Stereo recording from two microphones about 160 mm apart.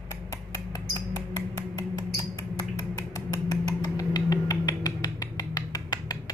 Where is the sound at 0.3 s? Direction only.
20° left (ahead or behind).